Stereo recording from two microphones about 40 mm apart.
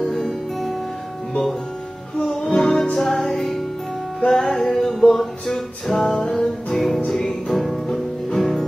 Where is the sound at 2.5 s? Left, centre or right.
Centre.